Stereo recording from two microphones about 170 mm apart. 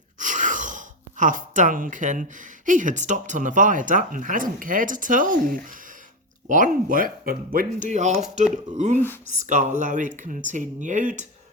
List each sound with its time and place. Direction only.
0.2 s speech: 50° right (ahead or behind)